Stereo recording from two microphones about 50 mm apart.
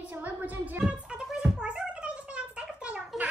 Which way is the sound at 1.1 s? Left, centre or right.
Right.